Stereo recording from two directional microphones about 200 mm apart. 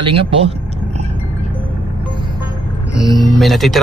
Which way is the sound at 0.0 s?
25° right (ahead or behind).